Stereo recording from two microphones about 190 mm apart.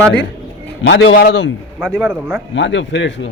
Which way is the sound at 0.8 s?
85° left.